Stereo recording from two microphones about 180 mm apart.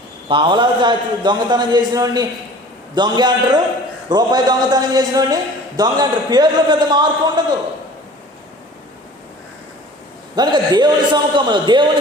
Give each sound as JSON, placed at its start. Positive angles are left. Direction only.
{"t": 0.3, "sound": "a man's voice", "side_deg": -25}
{"t": 10.3, "sound": "a man's voice", "side_deg": -25}